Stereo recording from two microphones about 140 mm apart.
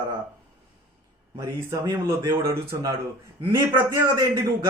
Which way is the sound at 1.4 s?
25° right (ahead or behind).